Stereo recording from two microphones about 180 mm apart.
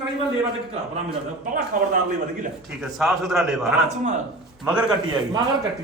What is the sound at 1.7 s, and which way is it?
Speech, 50° right (ahead or behind).